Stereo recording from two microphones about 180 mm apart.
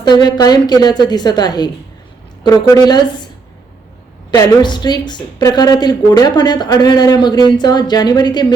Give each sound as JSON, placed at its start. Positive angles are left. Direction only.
{"t": 0.0, "sound": "a woman's voice", "side_deg": 25}
{"t": 4.3, "sound": "a woman's voice", "side_deg": 25}